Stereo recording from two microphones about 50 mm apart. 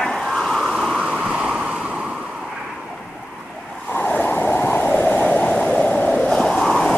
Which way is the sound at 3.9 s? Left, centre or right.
Left.